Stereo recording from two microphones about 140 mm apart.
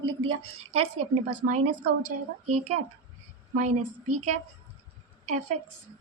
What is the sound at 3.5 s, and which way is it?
Speech, 55° right (ahead or behind).